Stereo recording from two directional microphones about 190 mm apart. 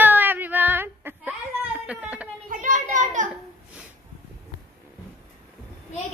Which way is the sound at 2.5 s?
40° right (ahead or behind).